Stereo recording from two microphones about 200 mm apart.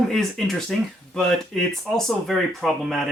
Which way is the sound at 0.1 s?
Centre (ahead or behind).